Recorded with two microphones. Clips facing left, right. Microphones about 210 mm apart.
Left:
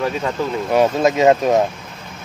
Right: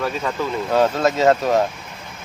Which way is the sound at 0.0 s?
15° left (ahead or behind).